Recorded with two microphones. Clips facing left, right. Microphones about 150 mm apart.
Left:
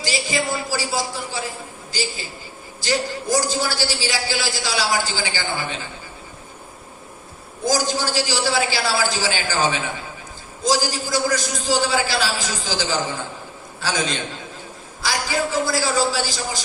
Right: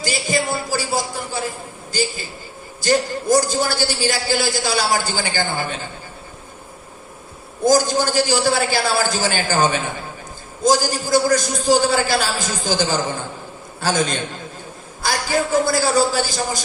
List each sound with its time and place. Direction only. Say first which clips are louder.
0.0 s a man's voice: right 2 dB; 50° right (ahead or behind)
7.6 s a man's voice: right 6 dB; 50° right (ahead or behind)